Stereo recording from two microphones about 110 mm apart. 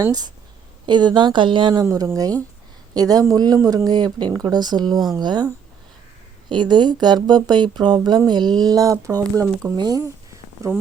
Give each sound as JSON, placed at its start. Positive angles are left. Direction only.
{"t": 0.0, "sound": "speech", "side_deg": -35}
{"t": 1.8, "sound": "speech", "side_deg": -35}
{"t": 3.8, "sound": "speech", "side_deg": -40}
{"t": 9.7, "sound": "speech", "side_deg": -40}
{"t": 10.6, "sound": "speech", "side_deg": -30}